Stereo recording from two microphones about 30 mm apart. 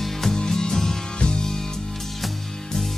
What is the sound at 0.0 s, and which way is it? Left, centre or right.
Music, centre.